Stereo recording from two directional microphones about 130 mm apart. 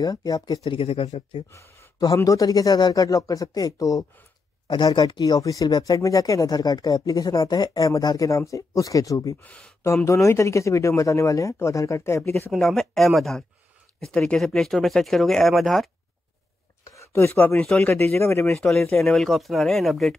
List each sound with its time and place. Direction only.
0.0 s speech: 30° left (ahead or behind)
0.7 s speech: 45° left (ahead or behind)
1.5 s speech: 20° left (ahead or behind)
9.4 s speech: 5° left (ahead or behind)
10.0 s speech: 25° left (ahead or behind)
12.4 s speech: centre (ahead or behind)
16.8 s a sound: 20° left (ahead or behind)
17.6 s speech: 5° left (ahead or behind)
18.5 s speech: 5° left (ahead or behind)
18.9 s speech: 20° left (ahead or behind)
19.1 s speech: centre (ahead or behind)